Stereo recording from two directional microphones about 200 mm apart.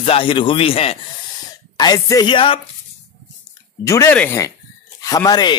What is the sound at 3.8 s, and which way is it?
Speech, 15° left (ahead or behind).